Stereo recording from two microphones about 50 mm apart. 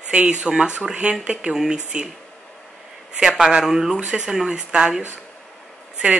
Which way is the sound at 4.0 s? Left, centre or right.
Right.